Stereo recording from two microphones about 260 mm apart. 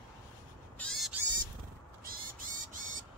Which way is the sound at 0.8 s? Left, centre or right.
Centre.